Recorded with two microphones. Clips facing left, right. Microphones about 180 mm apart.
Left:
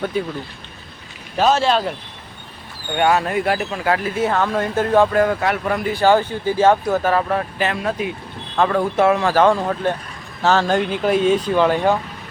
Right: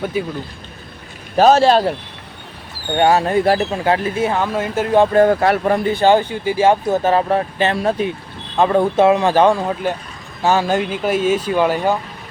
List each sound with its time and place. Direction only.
0.0 s speech: 10° right (ahead or behind)
1.4 s speech: 40° right (ahead or behind)
2.9 s speech: 30° right (ahead or behind)
4.2 s speech: 10° right (ahead or behind)
5.1 s speech: 35° right (ahead or behind); by 6.7 s 10° right (ahead or behind)
6.8 s speech: 20° right (ahead or behind); by 11.9 s 5° right (ahead or behind)